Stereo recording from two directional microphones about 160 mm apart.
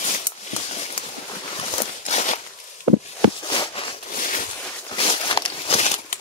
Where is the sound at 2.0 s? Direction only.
45° left (ahead or behind).